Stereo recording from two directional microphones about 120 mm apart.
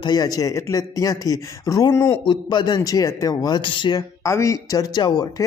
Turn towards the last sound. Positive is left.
turn(degrees=35)  # may be behind; listen again after turning